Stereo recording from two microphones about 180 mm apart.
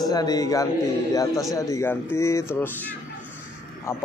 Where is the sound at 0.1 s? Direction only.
20° left (ahead or behind).